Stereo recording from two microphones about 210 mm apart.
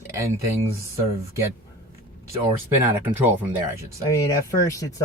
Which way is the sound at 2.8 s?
10° right (ahead or behind).